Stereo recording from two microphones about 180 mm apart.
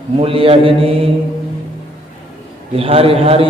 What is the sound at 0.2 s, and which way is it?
Speech, 30° right (ahead or behind).